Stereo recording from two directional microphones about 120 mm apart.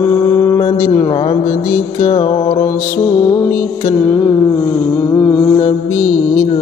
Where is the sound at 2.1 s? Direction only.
45° left (ahead or behind).